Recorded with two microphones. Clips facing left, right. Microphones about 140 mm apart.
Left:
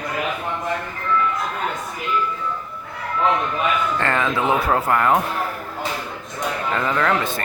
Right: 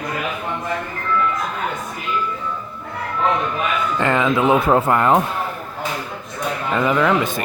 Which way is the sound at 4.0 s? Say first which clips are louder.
Right 8 dB; 15° right (ahead or behind).